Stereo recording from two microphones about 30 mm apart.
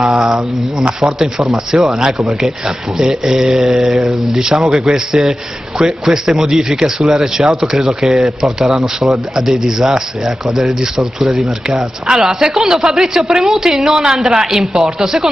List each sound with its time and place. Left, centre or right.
0.0 s speech: right
4.8 s a man's voice: centre
8.6 s speech: right
9.5 s a man's voice: centre